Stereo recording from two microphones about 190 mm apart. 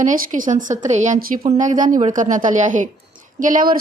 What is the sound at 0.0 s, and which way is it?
Speech, 40° right (ahead or behind).